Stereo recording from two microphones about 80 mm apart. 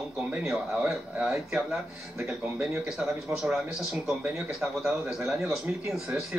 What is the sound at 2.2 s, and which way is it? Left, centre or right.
Speech, right.